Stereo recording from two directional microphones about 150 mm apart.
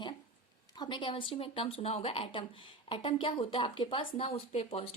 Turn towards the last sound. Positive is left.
turn(degrees=40)  # may be behind; listen again after turning